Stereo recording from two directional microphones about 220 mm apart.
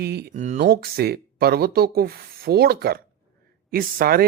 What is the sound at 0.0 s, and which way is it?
Speech, 45° right (ahead or behind).